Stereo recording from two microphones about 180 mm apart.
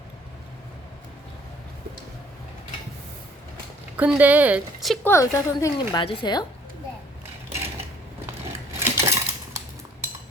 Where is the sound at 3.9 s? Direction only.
10° right (ahead or behind).